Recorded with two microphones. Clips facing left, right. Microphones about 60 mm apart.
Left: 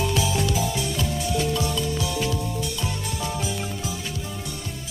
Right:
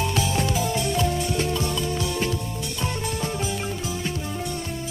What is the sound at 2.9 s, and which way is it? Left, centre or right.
Music, right.